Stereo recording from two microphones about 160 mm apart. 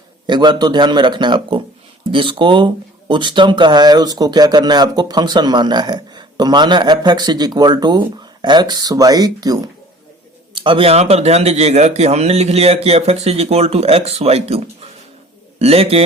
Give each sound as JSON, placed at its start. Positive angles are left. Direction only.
{"t": 0.3, "sound": "speech", "side_deg": -25}